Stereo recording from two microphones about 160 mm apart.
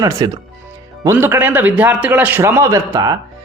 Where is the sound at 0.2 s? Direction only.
25° right (ahead or behind).